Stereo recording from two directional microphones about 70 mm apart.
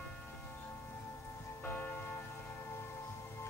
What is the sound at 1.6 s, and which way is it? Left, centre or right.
Church bell, left.